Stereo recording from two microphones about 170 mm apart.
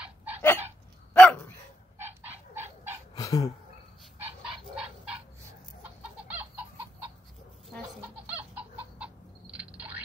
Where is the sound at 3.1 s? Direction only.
20° left (ahead or behind).